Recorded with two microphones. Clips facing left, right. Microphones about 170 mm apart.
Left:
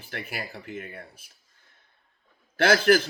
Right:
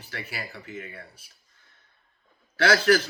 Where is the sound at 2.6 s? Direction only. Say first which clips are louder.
Left 1 dB; 55° left (ahead or behind).